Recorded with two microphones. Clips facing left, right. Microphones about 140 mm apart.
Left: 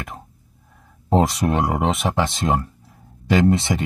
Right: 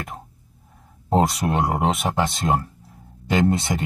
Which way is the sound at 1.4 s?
20° right (ahead or behind).